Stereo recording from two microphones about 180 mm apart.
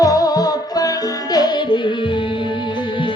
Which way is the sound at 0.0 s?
20° left (ahead or behind).